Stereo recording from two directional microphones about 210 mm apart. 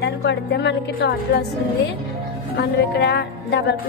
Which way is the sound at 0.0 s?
55° left (ahead or behind).